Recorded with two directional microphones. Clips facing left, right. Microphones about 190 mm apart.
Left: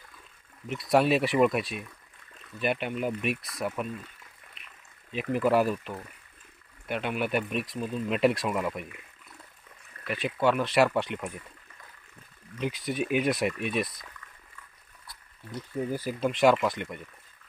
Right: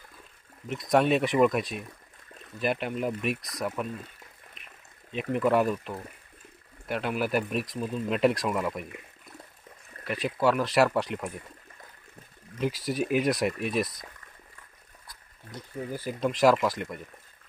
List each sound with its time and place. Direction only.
0.8 s speech: 5° left (ahead or behind)
5.3 s speech: 5° left (ahead or behind)
10.1 s speech: centre (ahead or behind)
12.5 s speech: centre (ahead or behind)
13.5 s speech: 35° right (ahead or behind)
15.9 s speech: 10° left (ahead or behind)